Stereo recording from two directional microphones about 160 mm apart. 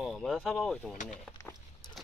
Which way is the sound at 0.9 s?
55° left (ahead or behind).